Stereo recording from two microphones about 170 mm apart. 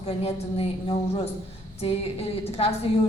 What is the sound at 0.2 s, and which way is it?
A woman's voice, 35° left (ahead or behind).